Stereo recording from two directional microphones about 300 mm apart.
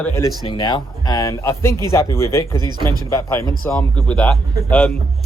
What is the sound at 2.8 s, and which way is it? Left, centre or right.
Speech, centre.